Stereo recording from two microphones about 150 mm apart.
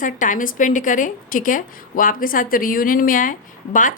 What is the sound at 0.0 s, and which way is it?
A woman's voice, 60° left (ahead or behind).